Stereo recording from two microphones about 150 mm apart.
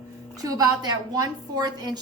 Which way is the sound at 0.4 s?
25° right (ahead or behind).